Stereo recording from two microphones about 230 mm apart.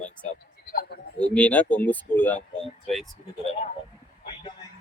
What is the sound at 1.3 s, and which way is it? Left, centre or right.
Speech, centre.